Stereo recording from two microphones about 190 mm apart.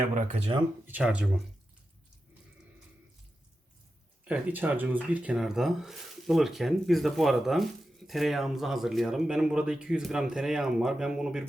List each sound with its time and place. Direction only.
0.0 s speech: 40° right (ahead or behind)
0.9 s speech: 10° right (ahead or behind)
4.3 s speech: 10° right (ahead or behind)